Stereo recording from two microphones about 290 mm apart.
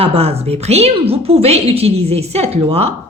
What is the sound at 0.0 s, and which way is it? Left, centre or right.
A woman's voice, centre.